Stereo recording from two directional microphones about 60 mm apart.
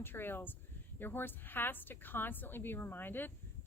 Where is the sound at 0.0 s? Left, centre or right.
Left.